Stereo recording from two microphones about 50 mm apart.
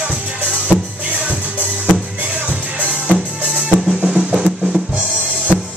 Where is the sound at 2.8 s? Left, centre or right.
Right.